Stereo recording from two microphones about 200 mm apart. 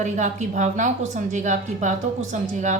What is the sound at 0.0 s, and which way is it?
A woman's voice, 35° right (ahead or behind).